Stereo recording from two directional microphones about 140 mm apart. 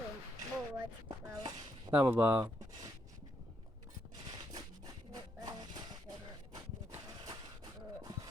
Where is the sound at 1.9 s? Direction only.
15° right (ahead or behind).